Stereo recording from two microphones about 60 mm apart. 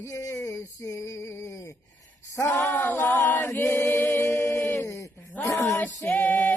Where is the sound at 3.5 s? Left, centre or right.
Left.